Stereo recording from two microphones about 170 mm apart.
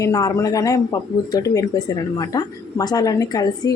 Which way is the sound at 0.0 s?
20° left (ahead or behind).